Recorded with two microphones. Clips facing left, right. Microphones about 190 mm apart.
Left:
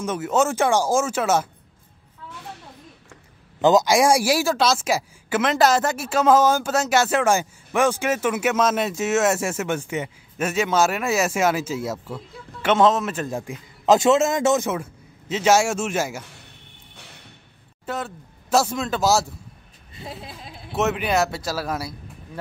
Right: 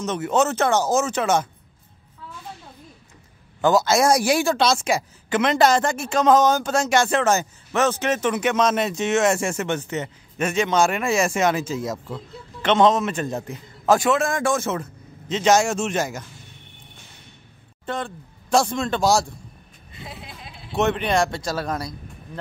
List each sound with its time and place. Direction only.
0.0 s a man's voice: 5° left (ahead or behind)
3.6 s a man's voice: 15° left (ahead or behind)
17.8 s speech: 5° left (ahead or behind)
20.0 s a sound: 40° left (ahead or behind)
20.7 s speech: 5° left (ahead or behind)